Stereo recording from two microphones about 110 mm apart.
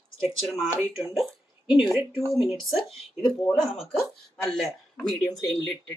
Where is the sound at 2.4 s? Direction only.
Centre (ahead or behind).